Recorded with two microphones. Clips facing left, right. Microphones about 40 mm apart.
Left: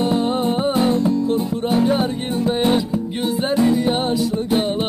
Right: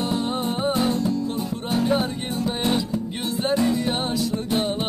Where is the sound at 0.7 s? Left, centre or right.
Left.